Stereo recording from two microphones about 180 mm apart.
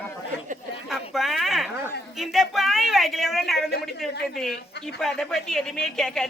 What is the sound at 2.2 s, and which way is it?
A woman's voice, centre (ahead or behind).